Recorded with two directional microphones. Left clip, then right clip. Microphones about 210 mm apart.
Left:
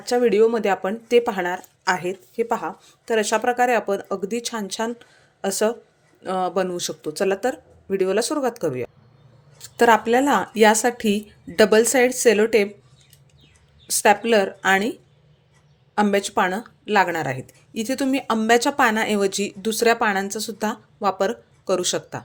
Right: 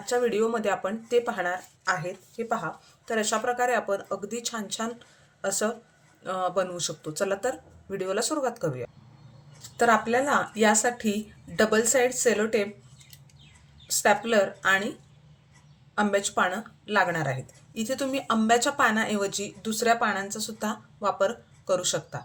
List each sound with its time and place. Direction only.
0.0 s a woman's voice: 30° left (ahead or behind)
13.8 s a woman's voice: 40° left (ahead or behind)
16.0 s a woman's voice: 35° left (ahead or behind)